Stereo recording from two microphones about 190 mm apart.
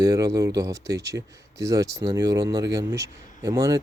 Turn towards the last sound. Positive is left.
turn(degrees=-15)  # may be behind; listen again after turning